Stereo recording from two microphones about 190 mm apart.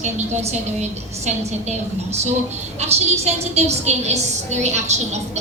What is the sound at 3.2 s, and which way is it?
A woman's voice, 35° right (ahead or behind).